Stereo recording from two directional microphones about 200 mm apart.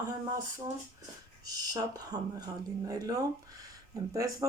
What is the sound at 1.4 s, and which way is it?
Speech, 20° right (ahead or behind).